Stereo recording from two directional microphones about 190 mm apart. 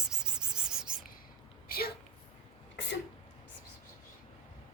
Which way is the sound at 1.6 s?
55° left (ahead or behind).